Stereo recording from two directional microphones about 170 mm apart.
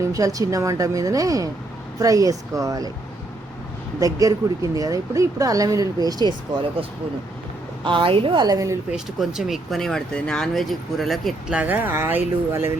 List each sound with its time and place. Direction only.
0.0 s speech: 20° right (ahead or behind)
4.0 s speech: 20° right (ahead or behind)
7.9 s speech: 30° right (ahead or behind)
8.9 s speech: centre (ahead or behind)